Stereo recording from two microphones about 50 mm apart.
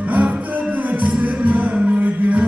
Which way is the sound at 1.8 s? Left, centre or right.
Right.